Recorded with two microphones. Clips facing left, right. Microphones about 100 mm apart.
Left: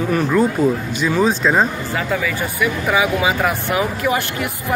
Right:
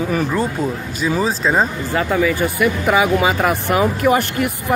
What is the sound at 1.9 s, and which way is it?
Speech, 35° right (ahead or behind).